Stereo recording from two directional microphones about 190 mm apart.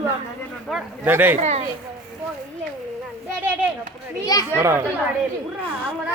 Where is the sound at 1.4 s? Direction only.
35° right (ahead or behind).